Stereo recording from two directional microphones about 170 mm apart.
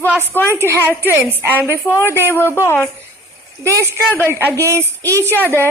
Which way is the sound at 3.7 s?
15° right (ahead or behind).